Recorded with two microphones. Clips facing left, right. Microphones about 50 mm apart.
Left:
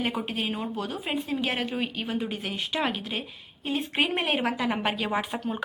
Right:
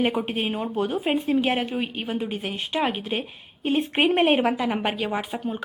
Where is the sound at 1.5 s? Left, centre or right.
Centre.